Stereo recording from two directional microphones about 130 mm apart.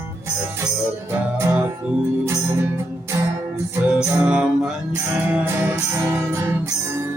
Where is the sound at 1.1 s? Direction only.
15° right (ahead or behind).